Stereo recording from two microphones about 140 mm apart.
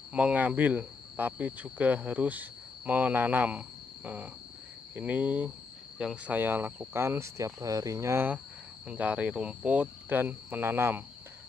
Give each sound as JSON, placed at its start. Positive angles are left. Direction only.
{"t": 0.1, "sound": "speech", "side_deg": -10}